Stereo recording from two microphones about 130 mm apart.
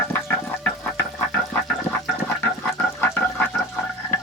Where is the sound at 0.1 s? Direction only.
15° left (ahead or behind).